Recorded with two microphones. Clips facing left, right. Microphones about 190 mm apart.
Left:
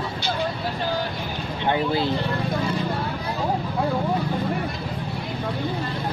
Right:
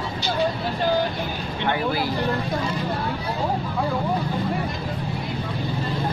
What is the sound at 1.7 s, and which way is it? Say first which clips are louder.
Speech: left 2 dB; 25° left (ahead or behind).